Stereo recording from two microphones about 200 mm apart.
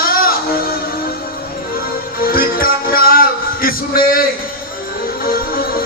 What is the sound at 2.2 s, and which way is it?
Music, 45° left (ahead or behind).